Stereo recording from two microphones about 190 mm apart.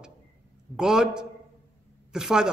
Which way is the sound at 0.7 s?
5° right (ahead or behind).